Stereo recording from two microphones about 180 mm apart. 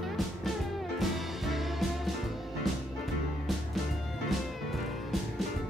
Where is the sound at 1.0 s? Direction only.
Centre (ahead or behind).